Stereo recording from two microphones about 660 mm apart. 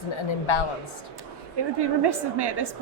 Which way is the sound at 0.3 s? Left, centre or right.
Left.